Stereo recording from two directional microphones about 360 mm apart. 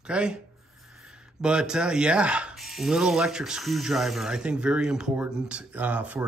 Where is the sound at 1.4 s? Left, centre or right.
Centre.